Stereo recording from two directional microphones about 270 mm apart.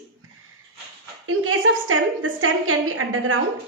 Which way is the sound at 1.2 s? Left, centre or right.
Right.